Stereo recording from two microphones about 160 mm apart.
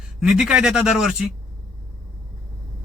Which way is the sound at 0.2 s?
5° right (ahead or behind).